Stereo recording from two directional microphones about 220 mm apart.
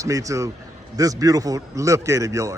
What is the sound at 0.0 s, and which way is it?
A man's voice, 15° right (ahead or behind).